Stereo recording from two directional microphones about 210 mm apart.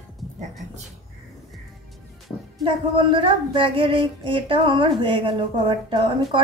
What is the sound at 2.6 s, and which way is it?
Speech, 25° right (ahead or behind).